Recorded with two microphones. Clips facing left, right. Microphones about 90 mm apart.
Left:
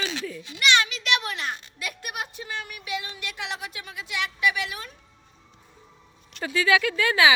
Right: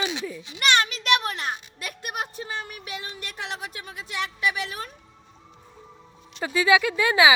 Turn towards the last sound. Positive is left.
turn(degrees=-15)  # may be behind; listen again after turning